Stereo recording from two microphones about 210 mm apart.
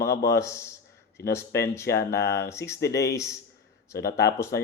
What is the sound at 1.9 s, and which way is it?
Speech, 50° left (ahead or behind).